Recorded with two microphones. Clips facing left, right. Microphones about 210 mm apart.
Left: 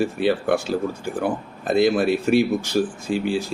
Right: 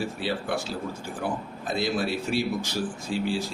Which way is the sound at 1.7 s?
55° left (ahead or behind).